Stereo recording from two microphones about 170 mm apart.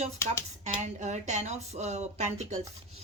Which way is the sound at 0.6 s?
45° right (ahead or behind).